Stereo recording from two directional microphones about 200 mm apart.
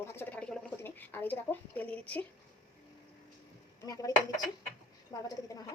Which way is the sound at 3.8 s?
20° left (ahead or behind).